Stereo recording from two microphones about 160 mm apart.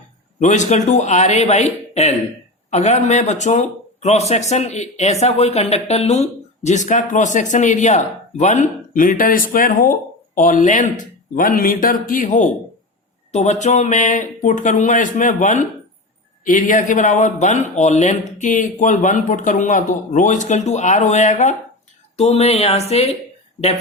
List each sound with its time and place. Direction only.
0.3 s speech: 50° left (ahead or behind)